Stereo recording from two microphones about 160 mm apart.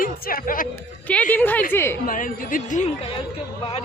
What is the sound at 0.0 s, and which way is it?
Speech, 60° left (ahead or behind).